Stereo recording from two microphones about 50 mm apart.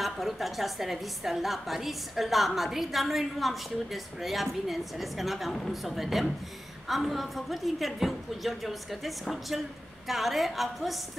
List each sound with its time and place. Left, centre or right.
0.0 s a woman's voice: centre